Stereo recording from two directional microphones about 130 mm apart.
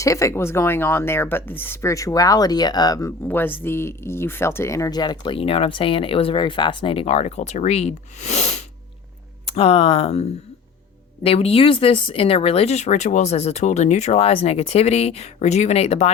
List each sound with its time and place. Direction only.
0.0 s speech: 25° left (ahead or behind)
3.2 s speech: 15° left (ahead or behind); by 16.1 s 55° left (ahead or behind)